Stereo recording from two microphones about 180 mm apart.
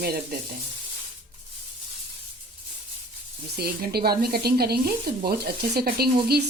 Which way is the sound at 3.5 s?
60° right (ahead or behind).